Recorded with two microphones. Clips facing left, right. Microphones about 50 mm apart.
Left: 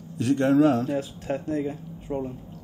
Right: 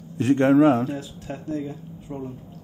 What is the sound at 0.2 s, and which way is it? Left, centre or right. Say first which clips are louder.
Speech: right 3 dB; right.